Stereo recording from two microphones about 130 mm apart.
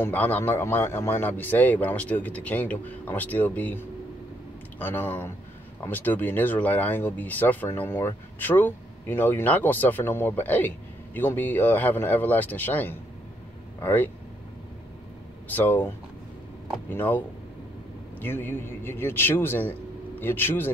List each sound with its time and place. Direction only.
0.0 s speech: 15° left (ahead or behind)
15.4 s speech: 15° left (ahead or behind)
16.9 s speech: 15° left (ahead or behind)
18.2 s speech: 15° left (ahead or behind)